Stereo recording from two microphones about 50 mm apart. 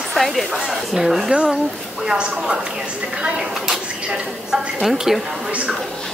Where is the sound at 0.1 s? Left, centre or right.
Centre.